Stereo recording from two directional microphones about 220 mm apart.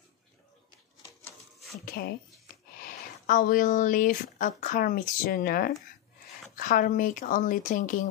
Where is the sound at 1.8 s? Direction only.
45° left (ahead or behind).